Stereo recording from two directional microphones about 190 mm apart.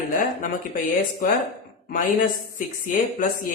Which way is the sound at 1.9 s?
45° left (ahead or behind).